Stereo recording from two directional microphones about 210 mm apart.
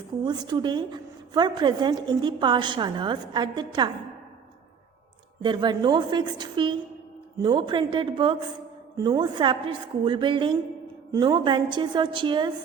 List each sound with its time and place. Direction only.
0.3 s a woman's voice: 20° right (ahead or behind)
5.4 s a woman's voice: 20° right (ahead or behind)